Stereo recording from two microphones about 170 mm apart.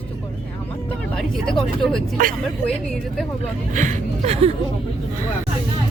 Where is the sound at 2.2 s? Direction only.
55° right (ahead or behind).